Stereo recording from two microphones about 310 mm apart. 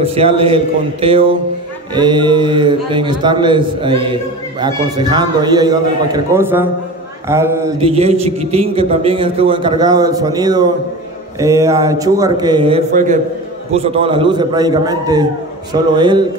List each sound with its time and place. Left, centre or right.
0.0 s a man's voice: centre